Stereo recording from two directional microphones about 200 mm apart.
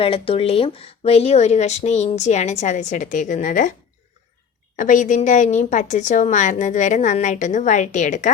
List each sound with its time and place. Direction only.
0.0 s speech: 30° left (ahead or behind)
4.8 s speech: 40° left (ahead or behind)